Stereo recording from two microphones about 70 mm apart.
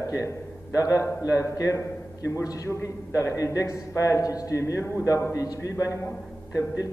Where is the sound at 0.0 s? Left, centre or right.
Left.